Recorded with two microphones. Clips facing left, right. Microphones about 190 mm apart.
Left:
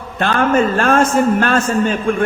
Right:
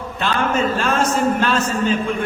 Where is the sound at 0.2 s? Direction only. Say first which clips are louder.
Left 5 dB; 55° left (ahead or behind).